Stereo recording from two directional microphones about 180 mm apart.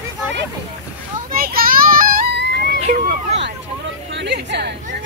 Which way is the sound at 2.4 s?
70° right (ahead or behind).